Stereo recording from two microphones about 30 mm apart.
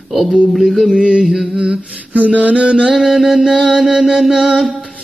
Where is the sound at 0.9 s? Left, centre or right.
Right.